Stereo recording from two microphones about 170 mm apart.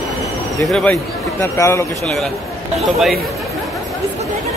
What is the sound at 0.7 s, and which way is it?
Speech, centre (ahead or behind).